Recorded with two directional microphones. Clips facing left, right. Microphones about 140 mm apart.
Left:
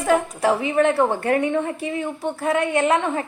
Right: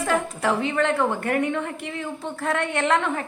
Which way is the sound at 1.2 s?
30° left (ahead or behind).